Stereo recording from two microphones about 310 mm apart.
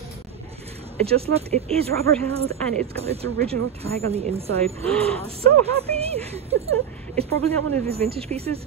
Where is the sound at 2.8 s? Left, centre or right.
Centre.